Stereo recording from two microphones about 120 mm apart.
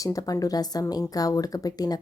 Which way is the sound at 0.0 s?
30° left (ahead or behind).